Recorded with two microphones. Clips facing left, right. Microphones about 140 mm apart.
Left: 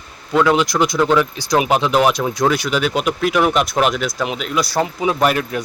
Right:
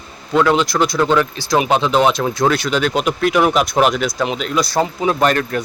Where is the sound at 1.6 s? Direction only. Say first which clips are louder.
Right 1 dB; 10° left (ahead or behind).